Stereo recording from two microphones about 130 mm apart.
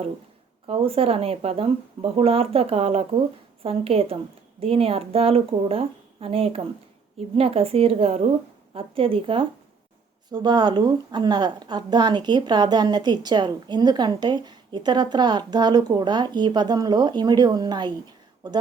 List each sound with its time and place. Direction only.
0.7 s a woman's voice: 50° right (ahead or behind); by 17.9 s 35° right (ahead or behind)